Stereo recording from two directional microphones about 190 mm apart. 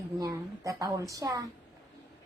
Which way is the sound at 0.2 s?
15° right (ahead or behind).